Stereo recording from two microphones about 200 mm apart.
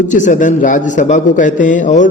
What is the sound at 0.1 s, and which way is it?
A man's voice, 40° left (ahead or behind).